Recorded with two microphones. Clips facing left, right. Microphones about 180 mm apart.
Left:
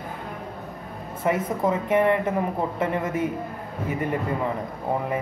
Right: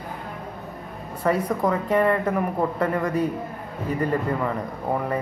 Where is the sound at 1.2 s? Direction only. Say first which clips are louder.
Right 1 dB; 20° left (ahead or behind).